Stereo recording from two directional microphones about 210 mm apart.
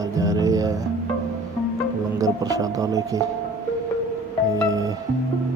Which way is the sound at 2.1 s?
15° right (ahead or behind).